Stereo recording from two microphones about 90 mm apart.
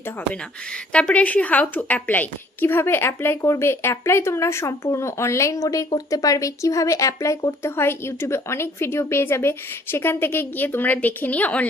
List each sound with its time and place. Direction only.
0.9 s a woman's voice: 15° left (ahead or behind)